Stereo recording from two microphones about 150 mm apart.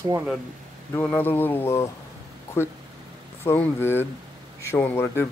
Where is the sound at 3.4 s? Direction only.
15° left (ahead or behind).